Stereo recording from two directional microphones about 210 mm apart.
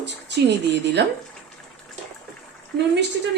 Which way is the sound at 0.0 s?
55° right (ahead or behind).